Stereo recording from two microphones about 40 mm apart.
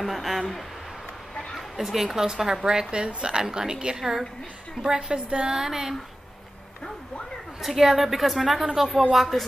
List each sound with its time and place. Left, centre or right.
0.0 s a sound: centre
1.8 s a woman's voice: centre; by 5.6 s right
5.6 s a woman's voice: centre
7.6 s a woman's voice: centre